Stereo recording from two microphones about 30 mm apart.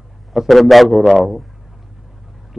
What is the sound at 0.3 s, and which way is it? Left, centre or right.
A man's voice, centre.